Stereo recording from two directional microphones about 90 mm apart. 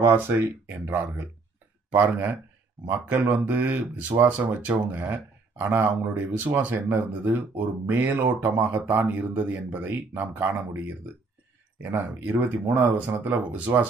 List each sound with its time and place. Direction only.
0.1 s speech: 25° right (ahead or behind)